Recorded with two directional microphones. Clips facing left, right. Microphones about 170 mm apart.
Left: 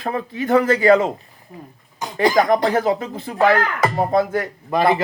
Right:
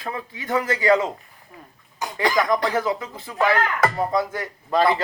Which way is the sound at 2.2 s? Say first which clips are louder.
Left 5 dB; 40° left (ahead or behind).